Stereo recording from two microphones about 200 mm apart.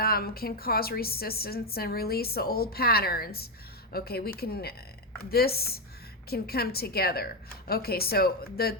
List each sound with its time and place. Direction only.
0.0 s a woman's voice: 50° left (ahead or behind)